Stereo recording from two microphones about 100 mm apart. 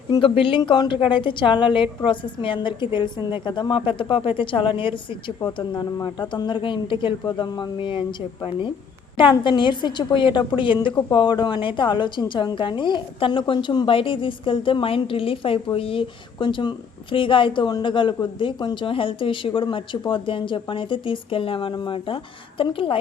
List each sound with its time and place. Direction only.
0.2 s a woman's voice: 60° left (ahead or behind)
5.5 s a woman's voice: 45° left (ahead or behind); by 23.0 s 60° left (ahead or behind)